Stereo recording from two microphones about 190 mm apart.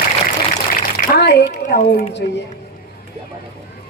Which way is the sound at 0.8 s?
55° left (ahead or behind).